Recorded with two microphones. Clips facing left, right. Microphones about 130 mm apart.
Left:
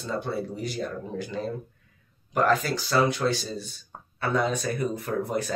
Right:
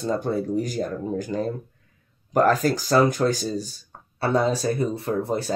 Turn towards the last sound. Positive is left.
turn(degrees=-30)  # may be behind; listen again after turning